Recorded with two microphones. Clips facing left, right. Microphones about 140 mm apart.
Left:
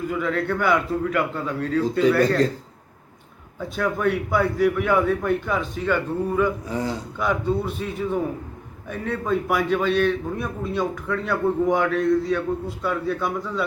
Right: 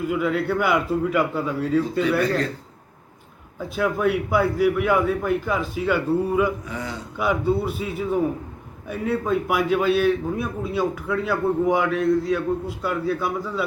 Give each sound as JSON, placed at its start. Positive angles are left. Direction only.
{"t": 0.1, "sound": "a man's voice", "side_deg": -5}
{"t": 3.8, "sound": "a man's voice", "side_deg": -5}
{"t": 6.7, "sound": "a man's voice", "side_deg": 35}
{"t": 7.2, "sound": "a man's voice", "side_deg": -5}